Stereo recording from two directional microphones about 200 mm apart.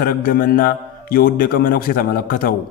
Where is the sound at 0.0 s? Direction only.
45° left (ahead or behind).